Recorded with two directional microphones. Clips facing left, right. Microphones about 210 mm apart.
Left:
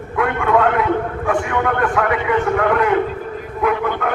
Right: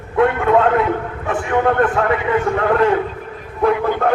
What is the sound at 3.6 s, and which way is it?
Speech, 35° right (ahead or behind).